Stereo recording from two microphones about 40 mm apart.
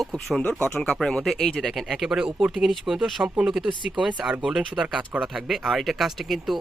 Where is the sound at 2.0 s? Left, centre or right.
Centre.